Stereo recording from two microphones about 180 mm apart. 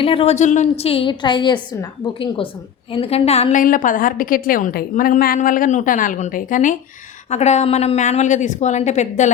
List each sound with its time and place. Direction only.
0.0 s a woman's voice: 30° left (ahead or behind)